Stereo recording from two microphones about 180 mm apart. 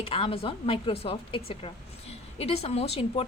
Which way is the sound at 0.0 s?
30° left (ahead or behind).